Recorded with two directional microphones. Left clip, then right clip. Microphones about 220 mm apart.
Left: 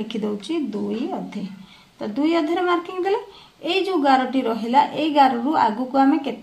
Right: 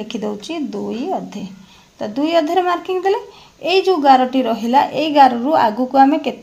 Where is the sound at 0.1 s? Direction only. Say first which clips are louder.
Right 2 dB; 35° right (ahead or behind).